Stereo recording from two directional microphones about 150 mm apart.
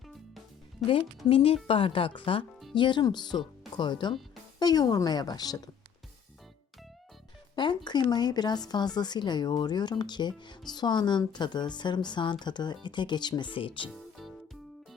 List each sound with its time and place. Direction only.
0.9 s a woman's voice: 35° left (ahead or behind)
7.5 s music: 30° left (ahead or behind)
7.9 s a woman's voice: 30° left (ahead or behind)